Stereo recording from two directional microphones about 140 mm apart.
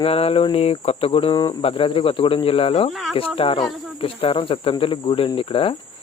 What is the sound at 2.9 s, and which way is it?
Speech, centre (ahead or behind).